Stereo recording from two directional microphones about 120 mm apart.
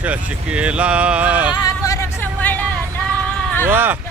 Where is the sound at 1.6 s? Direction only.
30° left (ahead or behind).